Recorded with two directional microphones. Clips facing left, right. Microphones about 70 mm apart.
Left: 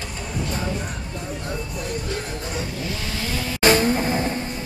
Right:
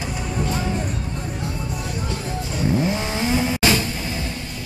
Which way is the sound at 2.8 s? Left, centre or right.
Right.